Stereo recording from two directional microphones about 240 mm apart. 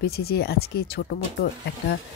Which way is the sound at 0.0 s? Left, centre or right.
Left.